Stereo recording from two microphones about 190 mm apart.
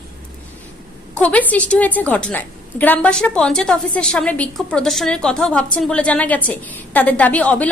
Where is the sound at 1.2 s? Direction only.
10° left (ahead or behind).